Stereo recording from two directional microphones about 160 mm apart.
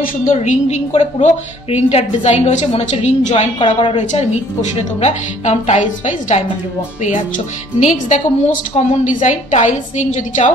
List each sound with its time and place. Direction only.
0.0 s a woman's voice: 55° left (ahead or behind)
3.5 s a woman's voice: 35° left (ahead or behind)
3.9 s a woman's voice: 45° left (ahead or behind)